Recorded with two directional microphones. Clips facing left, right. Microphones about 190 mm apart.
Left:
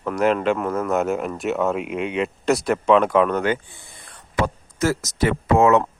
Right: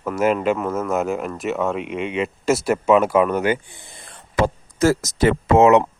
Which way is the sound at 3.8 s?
25° right (ahead or behind).